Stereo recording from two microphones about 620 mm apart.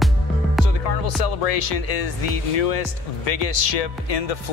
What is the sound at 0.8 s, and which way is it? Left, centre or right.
Speech, left.